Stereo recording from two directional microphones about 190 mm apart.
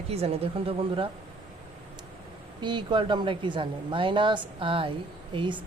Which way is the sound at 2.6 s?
25° right (ahead or behind).